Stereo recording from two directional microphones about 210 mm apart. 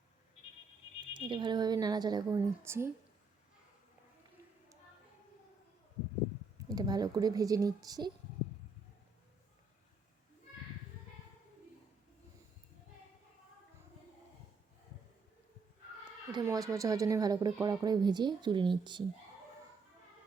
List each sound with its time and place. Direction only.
1.1 s speech: 20° right (ahead or behind)
6.7 s speech: 20° right (ahead or behind)
16.3 s speech: 15° right (ahead or behind)